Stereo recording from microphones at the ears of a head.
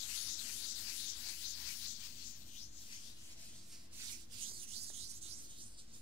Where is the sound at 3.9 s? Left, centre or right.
Right.